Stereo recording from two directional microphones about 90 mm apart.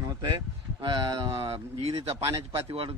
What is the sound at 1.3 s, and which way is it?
A man's voice, 90° right.